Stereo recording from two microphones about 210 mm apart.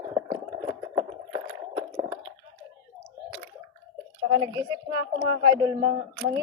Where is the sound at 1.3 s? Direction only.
20° right (ahead or behind).